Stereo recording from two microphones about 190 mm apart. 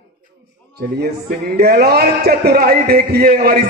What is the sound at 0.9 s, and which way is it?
A man's voice, 55° right (ahead or behind).